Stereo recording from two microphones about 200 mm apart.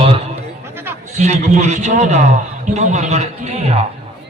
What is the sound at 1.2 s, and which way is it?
A man's voice, 35° right (ahead or behind).